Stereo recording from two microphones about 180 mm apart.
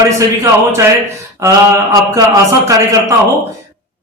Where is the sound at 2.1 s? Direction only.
15° right (ahead or behind).